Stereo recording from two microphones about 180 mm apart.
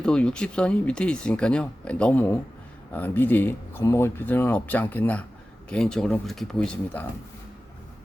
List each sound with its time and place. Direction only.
0.0 s speech: 5° left (ahead or behind)